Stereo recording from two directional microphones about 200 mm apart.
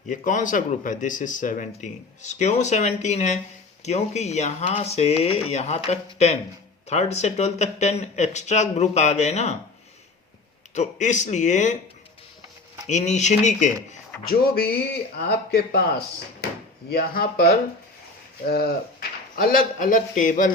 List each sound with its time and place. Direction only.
0.1 s speech: 40° left (ahead or behind)
10.8 s speech: 35° left (ahead or behind)
12.8 s speech: 35° left (ahead or behind)
14.3 s speech: 50° left (ahead or behind)